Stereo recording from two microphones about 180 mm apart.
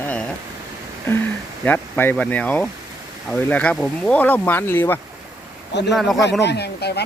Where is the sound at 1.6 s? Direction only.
10° left (ahead or behind).